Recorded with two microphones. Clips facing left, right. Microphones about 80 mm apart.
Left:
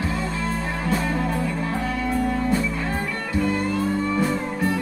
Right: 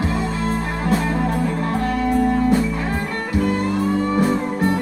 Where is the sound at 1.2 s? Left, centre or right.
Right.